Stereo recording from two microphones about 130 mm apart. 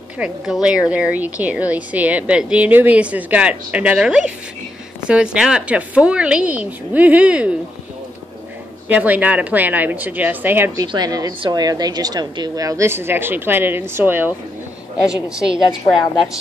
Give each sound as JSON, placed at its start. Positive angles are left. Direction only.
{"t": 0.2, "sound": "a woman's voice", "side_deg": -5}
{"t": 8.8, "sound": "a woman's voice", "side_deg": -10}
{"t": 10.8, "sound": "a woman's voice", "side_deg": -30}
{"t": 15.0, "sound": "a woman's voice", "side_deg": -5}